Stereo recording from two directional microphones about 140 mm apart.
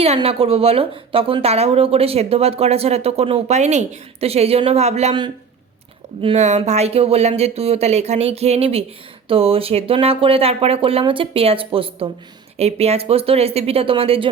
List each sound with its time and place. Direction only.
0.0 s a woman's voice: 45° right (ahead or behind)
6.3 s a woman's voice: 55° right (ahead or behind)